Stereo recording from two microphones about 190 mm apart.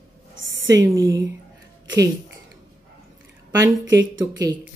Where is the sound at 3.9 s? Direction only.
75° right (ahead or behind).